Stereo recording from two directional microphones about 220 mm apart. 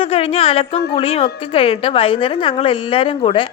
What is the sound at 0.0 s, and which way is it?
A woman's voice, 25° left (ahead or behind).